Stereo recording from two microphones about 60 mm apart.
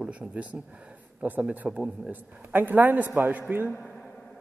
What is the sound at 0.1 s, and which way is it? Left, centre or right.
A woman's voice, right.